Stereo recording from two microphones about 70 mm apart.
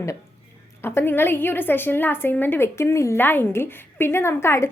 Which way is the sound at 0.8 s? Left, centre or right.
Left.